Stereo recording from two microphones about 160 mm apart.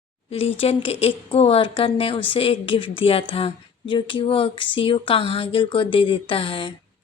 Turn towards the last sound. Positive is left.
turn(degrees=30)  # may be behind; listen again after turning